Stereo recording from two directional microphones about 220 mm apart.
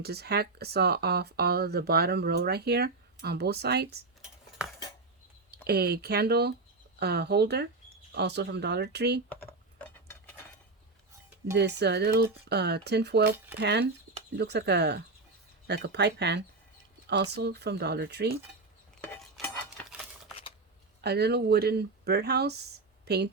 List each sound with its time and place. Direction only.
0.0 s speech: 45° right (ahead or behind)
4.2 s cutlery: 5° right (ahead or behind)
5.6 s speech: 45° right (ahead or behind)
11.5 s speech: 50° right (ahead or behind)
19.2 s a sound: 5° left (ahead or behind)
21.0 s speech: 50° right (ahead or behind)